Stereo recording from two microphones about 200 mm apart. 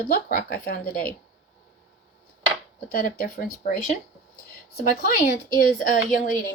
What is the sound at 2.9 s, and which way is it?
A woman's voice, 45° left (ahead or behind).